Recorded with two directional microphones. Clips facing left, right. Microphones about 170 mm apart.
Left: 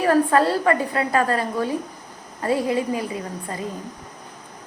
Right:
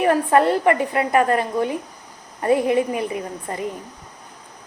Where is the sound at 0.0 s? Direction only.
20° right (ahead or behind).